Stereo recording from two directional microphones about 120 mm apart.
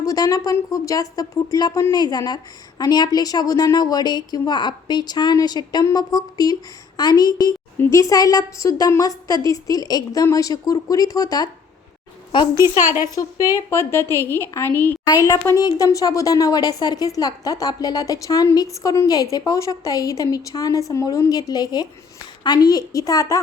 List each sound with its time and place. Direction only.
0.0 s a woman's voice: 30° left (ahead or behind)
12.6 s a woman's voice: 20° right (ahead or behind)
13.1 s speech: 25° left (ahead or behind)
15.1 s a woman's voice: 30° left (ahead or behind)